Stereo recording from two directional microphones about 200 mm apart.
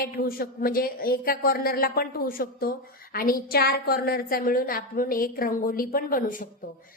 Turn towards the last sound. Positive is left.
turn(degrees=40)  # may be behind; listen again after turning